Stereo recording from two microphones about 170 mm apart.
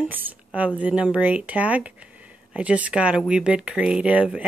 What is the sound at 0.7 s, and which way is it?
Speech, 10° right (ahead or behind).